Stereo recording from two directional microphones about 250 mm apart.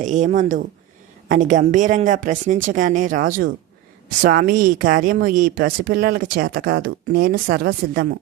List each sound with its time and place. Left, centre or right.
0.0 s speech: right